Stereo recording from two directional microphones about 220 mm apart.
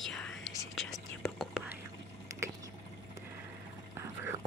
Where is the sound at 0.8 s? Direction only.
Centre (ahead or behind).